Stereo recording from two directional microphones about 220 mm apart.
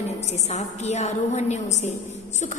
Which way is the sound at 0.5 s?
30° left (ahead or behind).